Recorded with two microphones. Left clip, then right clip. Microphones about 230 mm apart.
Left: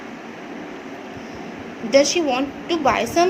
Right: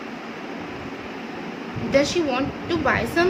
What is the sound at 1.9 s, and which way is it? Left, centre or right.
A woman's voice, centre.